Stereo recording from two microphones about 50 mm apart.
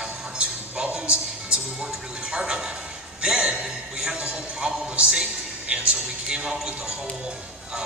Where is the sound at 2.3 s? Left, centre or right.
Centre.